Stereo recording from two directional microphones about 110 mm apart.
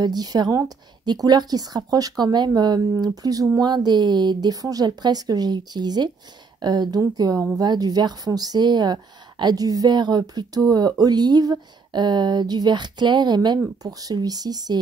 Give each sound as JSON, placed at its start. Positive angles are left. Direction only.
{"t": 0.0, "sound": "speech", "side_deg": -35}